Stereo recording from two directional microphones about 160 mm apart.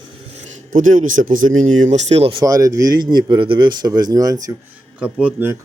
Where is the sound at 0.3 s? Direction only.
45° right (ahead or behind).